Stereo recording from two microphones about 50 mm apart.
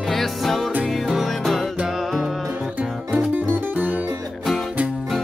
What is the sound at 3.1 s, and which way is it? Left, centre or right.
Music, right.